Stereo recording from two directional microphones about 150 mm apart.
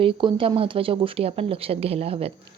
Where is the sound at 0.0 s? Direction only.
35° right (ahead or behind).